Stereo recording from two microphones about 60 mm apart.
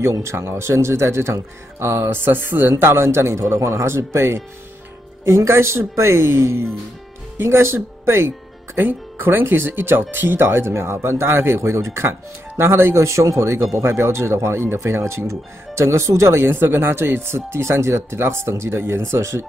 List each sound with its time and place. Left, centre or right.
0.2 s speech: right
2.7 s speech: right
16.4 s speech: right